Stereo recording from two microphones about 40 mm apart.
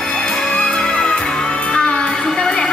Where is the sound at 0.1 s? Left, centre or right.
Centre.